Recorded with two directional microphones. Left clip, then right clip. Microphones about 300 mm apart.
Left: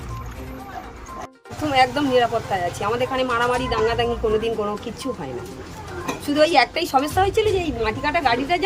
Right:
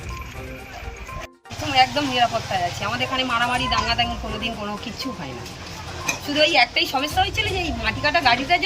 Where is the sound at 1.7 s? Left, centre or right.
Centre.